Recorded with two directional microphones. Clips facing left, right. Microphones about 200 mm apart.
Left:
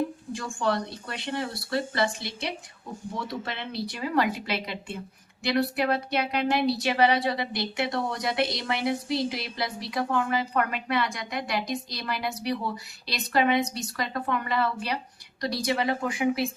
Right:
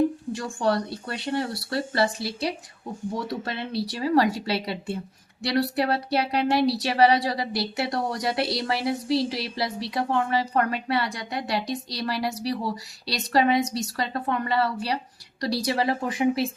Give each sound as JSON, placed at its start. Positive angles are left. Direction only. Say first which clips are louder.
{"t": 0.3, "sound": "a woman's voice", "louder": "even", "side_deg": -35}